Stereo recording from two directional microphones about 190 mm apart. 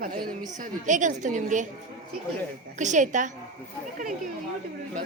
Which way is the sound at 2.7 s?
40° right (ahead or behind).